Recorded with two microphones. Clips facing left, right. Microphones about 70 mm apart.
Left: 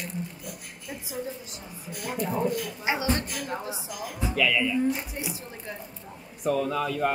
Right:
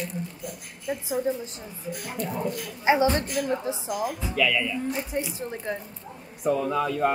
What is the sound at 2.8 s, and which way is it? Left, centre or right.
A woman's voice, right.